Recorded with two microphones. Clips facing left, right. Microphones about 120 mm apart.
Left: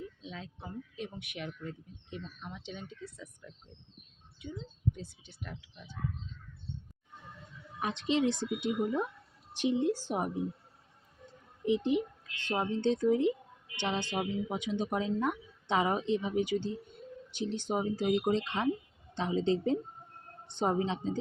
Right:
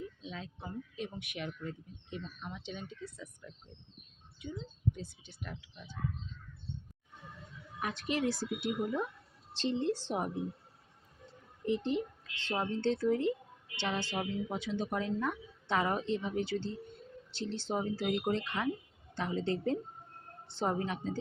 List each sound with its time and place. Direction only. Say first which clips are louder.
7.8 s a woman's voice: left 4 dB; 20° left (ahead or behind)
11.6 s a woman's voice: left 4 dB; 15° left (ahead or behind)